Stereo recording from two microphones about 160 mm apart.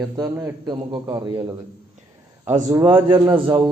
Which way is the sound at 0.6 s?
25° right (ahead or behind).